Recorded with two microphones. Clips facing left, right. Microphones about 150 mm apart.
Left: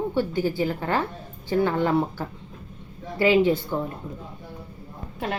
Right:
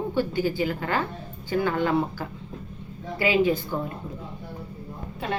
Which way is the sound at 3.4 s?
25° left (ahead or behind).